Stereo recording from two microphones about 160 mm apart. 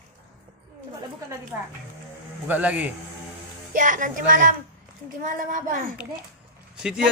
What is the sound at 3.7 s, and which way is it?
Speech, 55° right (ahead or behind).